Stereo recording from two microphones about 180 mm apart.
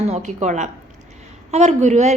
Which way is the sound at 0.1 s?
40° right (ahead or behind).